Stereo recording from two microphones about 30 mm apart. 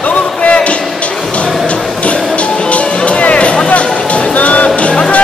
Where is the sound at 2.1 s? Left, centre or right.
Left.